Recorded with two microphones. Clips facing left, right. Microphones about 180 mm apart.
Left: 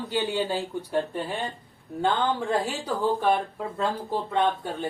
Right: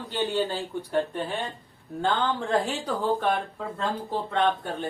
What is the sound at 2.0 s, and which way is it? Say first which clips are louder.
Speech: left 1 dB; 10° left (ahead or behind).